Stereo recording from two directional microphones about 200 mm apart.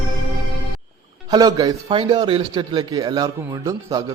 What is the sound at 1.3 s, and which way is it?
A man's voice, 20° right (ahead or behind).